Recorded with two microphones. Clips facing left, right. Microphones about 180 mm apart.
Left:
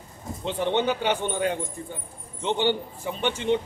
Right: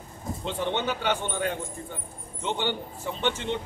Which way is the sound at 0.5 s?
20° left (ahead or behind).